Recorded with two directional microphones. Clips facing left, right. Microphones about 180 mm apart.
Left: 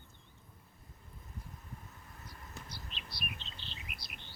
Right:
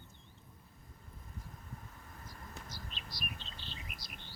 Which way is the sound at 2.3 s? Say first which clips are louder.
Even; 45° right (ahead or behind).